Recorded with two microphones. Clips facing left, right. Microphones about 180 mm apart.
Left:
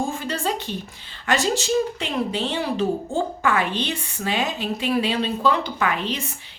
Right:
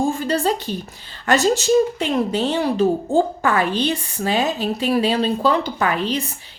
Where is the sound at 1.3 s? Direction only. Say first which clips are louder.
Right 5 dB; 45° right (ahead or behind).